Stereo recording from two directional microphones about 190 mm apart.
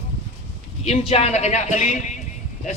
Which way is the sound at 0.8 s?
30° left (ahead or behind).